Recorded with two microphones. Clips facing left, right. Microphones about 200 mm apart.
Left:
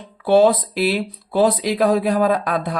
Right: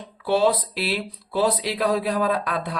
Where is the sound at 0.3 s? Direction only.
50° left (ahead or behind).